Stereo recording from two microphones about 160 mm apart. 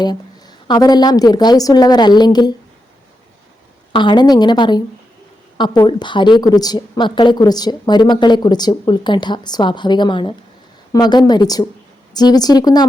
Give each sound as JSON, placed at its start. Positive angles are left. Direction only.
{"t": 0.0, "sound": "a woman's voice", "side_deg": 25}
{"t": 3.9, "sound": "a woman's voice", "side_deg": 30}